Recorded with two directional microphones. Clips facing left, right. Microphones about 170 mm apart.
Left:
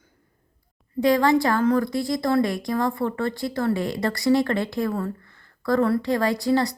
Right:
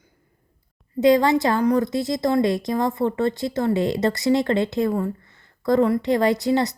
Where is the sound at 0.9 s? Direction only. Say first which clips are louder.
Right 2 dB; 20° right (ahead or behind).